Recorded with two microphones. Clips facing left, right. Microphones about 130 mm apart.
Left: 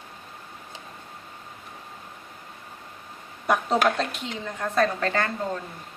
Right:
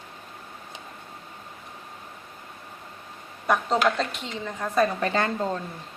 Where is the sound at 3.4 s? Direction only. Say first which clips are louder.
Even; 5° left (ahead or behind); by 5.3 s 20° right (ahead or behind).